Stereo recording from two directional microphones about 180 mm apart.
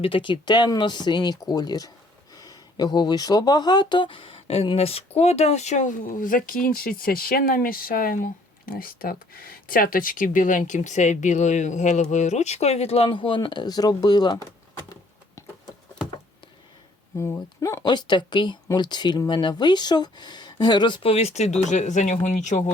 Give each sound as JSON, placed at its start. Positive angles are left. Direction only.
{"t": 0.0, "sound": "speech", "side_deg": 30}
{"t": 15.4, "sound": "a sound", "side_deg": 15}
{"t": 17.2, "sound": "speech", "side_deg": 15}